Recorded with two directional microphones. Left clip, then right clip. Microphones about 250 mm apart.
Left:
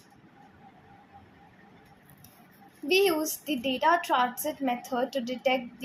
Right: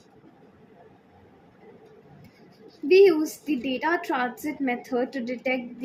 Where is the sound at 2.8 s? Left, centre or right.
Centre.